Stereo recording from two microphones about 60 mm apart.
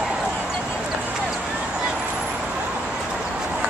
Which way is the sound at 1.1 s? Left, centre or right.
Centre.